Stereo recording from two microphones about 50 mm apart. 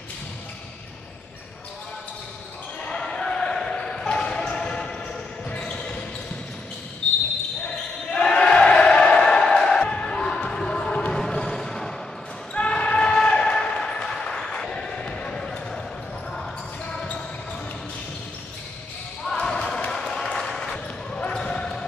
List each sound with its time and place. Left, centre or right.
2.8 s basketball bounce: centre
8.1 s crowd: centre
12.5 s basketball bounce: left
16.8 s basketball bounce: centre
19.4 s basketball bounce: centre
19.9 s a sound: centre
20.2 s basketball bounce: centre